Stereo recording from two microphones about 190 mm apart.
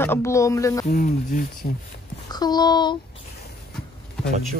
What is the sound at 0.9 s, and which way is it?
Speech, 45° left (ahead or behind).